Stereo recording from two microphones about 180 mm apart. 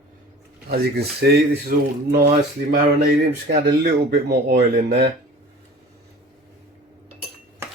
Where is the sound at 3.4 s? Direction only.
70° right (ahead or behind).